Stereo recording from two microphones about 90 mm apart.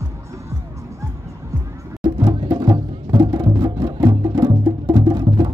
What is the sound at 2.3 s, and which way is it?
Music, 45° right (ahead or behind).